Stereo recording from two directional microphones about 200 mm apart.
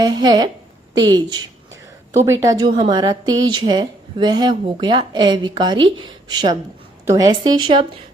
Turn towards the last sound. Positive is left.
turn(degrees=-25)  # may be behind; listen again after turning